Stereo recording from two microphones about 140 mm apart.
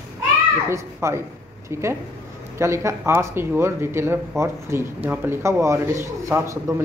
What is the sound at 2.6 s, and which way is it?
A man's voice, 20° right (ahead or behind).